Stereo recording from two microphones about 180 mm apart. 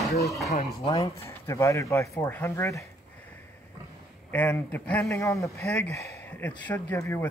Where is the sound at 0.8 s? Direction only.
20° left (ahead or behind).